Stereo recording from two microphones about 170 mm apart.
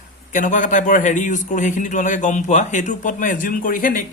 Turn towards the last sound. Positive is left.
turn(degrees=55)  # may be behind; listen again after turning